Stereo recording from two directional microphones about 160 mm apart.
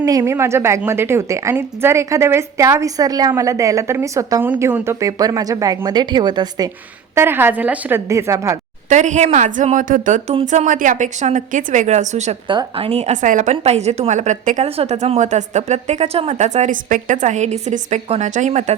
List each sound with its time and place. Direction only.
0.0 s a woman's voice: 20° right (ahead or behind)
7.2 s a woman's voice: 15° right (ahead or behind)
8.9 s a woman's voice: 50° right (ahead or behind)
12.5 s a woman's voice: 35° right (ahead or behind); by 18.7 s 50° right (ahead or behind)